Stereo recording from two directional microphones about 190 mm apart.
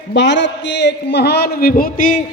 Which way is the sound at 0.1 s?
70° left (ahead or behind).